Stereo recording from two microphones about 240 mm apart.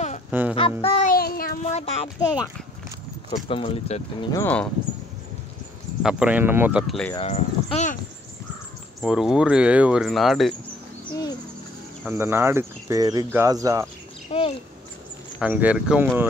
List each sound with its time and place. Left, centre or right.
0.3 s music: centre
0.6 s a child's voice: left
6.0 s speech: centre
7.2 s speech: left
9.0 s speech: centre
12.1 s speech: centre
14.3 s bird: left
15.3 s speech: centre